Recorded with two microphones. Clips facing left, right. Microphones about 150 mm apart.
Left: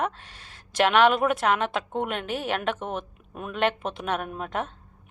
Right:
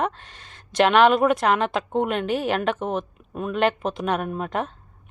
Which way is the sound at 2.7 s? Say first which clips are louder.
Right 6 dB; 35° right (ahead or behind).